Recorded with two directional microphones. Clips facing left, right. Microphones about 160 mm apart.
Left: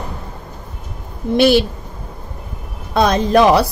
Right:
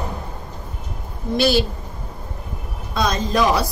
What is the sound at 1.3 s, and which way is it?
Speech, 60° left (ahead or behind).